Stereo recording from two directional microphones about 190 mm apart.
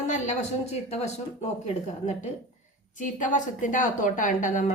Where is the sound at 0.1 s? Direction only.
35° left (ahead or behind).